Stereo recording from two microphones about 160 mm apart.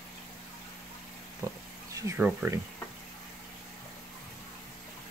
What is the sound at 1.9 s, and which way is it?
Speech, 20° right (ahead or behind).